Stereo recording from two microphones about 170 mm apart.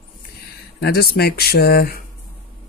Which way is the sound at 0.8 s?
65° left (ahead or behind).